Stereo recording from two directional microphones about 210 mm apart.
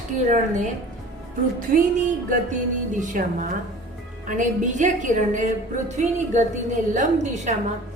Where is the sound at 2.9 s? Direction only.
40° right (ahead or behind).